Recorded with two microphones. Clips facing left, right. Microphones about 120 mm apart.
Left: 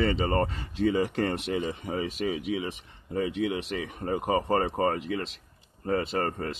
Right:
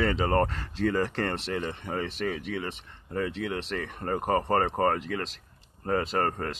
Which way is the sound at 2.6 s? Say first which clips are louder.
Left 1 dB; 80° right.